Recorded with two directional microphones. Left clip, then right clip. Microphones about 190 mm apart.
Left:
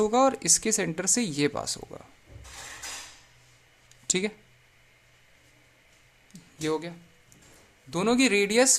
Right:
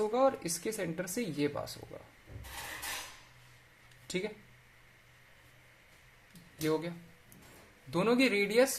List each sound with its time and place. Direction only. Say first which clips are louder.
0.0 s speech: left 6 dB; 35° left (ahead or behind)
4.0 s a sound: left 9 dB; 35° left (ahead or behind)
6.6 s speech: left 3 dB; 25° left (ahead or behind)